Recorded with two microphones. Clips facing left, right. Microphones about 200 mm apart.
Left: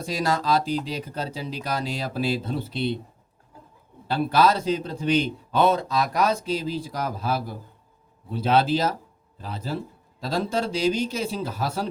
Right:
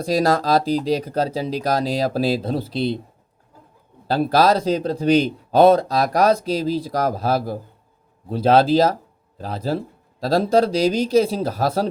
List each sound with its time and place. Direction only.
0.0 s speech: 35° right (ahead or behind)
4.1 s speech: 35° right (ahead or behind)